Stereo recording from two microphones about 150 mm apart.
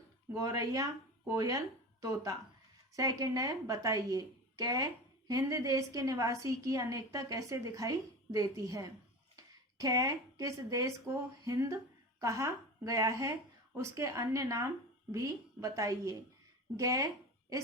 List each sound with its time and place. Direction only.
0.3 s a woman's voice: 25° right (ahead or behind)